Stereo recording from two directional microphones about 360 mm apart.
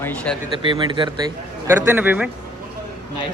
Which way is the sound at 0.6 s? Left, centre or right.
Centre.